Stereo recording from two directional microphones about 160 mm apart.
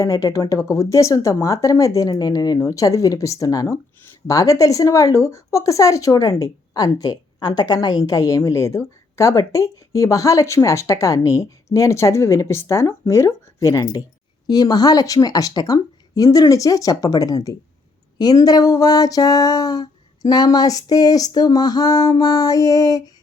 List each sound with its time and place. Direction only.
0.0 s speech: 20° left (ahead or behind)